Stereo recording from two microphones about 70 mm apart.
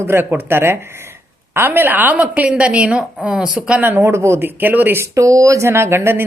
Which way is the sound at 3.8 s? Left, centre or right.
Right.